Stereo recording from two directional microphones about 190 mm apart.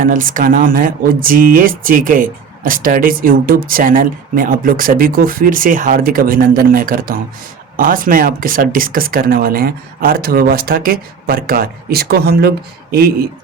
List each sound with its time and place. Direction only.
0.0 s speech: 45° right (ahead or behind)